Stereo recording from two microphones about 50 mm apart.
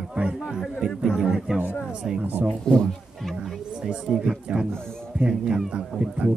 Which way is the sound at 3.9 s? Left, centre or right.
Centre.